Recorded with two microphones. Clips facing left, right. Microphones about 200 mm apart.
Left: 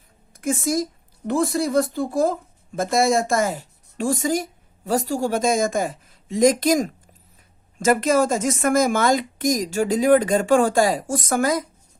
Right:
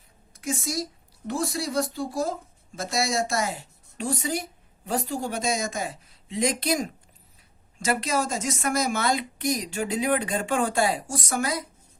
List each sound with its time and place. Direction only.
0.3 s a woman's voice: 55° left (ahead or behind)
11.0 s a woman's voice: 90° left
11.3 s speech: 45° left (ahead or behind)